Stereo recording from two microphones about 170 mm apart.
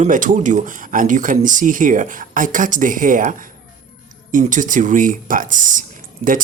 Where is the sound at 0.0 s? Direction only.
50° right (ahead or behind).